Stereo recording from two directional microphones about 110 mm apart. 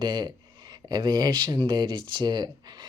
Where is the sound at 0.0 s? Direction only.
40° right (ahead or behind).